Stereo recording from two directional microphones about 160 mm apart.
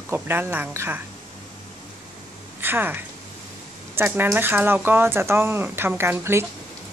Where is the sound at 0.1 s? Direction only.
10° right (ahead or behind).